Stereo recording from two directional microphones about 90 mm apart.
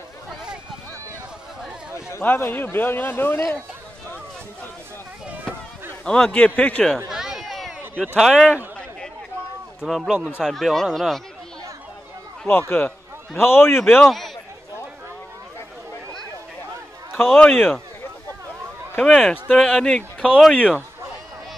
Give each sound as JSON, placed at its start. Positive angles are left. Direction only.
{"t": 2.0, "sound": "a man's voice", "side_deg": 30}
{"t": 6.0, "sound": "a man's voice", "side_deg": 10}
{"t": 7.1, "sound": "a sound", "side_deg": -5}
{"t": 8.2, "sound": "speech", "side_deg": -5}
{"t": 9.8, "sound": "speech", "side_deg": 0}
{"t": 12.4, "sound": "a man's voice", "side_deg": 25}
{"t": 13.8, "sound": "speech", "side_deg": 0}
{"t": 17.3, "sound": "a man's voice", "side_deg": 10}
{"t": 18.9, "sound": "a man's voice", "side_deg": 5}